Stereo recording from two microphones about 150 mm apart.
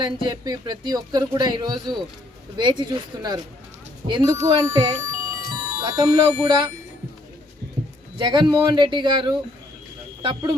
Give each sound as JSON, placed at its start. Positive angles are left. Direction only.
{"t": 0.0, "sound": "speech", "side_deg": -25}
{"t": 8.2, "sound": "speech", "side_deg": -30}